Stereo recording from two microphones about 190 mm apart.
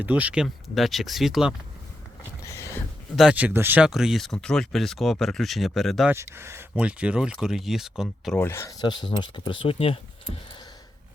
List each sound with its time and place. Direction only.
0.0 s speech: 10° right (ahead or behind)
2.4 s boat: 15° left (ahead or behind)
3.2 s speech: 5° right (ahead or behind)
6.1 s speech: 15° right (ahead or behind); by 8.4 s 5° left (ahead or behind)
8.4 s speech: 15° left (ahead or behind)